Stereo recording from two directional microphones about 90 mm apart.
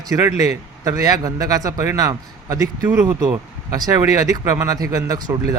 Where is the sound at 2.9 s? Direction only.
25° right (ahead or behind).